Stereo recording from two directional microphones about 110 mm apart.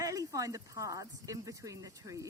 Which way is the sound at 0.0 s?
30° right (ahead or behind).